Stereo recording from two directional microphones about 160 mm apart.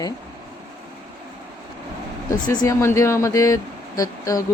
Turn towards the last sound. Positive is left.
turn(degrees=20)  # may be behind; listen again after turning